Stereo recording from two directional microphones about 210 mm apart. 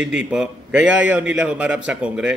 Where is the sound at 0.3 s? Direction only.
5° right (ahead or behind).